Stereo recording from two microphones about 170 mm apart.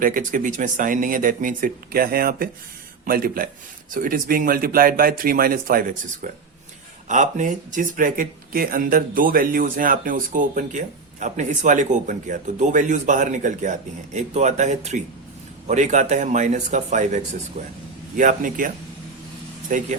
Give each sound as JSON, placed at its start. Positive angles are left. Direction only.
{"t": 0.0, "sound": "speech", "side_deg": -55}
{"t": 19.7, "sound": "speech", "side_deg": -50}